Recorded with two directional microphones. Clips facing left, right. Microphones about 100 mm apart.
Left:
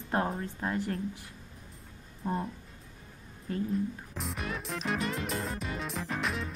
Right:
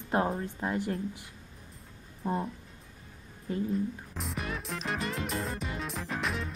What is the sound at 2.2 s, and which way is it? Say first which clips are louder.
Music: right 1 dB; 5° right (ahead or behind).